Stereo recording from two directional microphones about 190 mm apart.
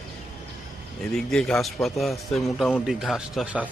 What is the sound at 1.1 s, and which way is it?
A man's voice, 5° left (ahead or behind).